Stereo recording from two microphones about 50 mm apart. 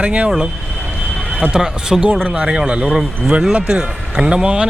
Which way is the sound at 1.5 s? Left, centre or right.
Centre.